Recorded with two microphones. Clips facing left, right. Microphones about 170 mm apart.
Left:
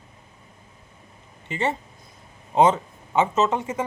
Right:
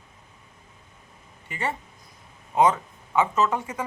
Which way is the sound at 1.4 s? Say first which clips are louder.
Left 5 dB; 25° left (ahead or behind).